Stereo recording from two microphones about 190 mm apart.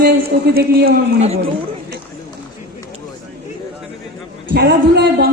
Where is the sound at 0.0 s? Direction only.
55° right (ahead or behind).